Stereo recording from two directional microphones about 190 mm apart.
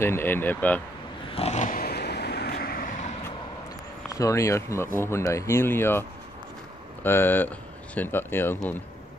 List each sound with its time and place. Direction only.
0.0 s speech: 10° left (ahead or behind)
1.3 s vehicle: 35° left (ahead or behind)
4.1 s speech: 15° left (ahead or behind)